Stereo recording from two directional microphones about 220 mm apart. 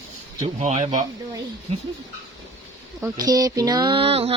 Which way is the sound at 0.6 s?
30° right (ahead or behind).